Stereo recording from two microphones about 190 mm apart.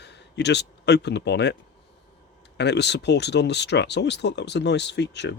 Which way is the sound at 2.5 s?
65° left (ahead or behind).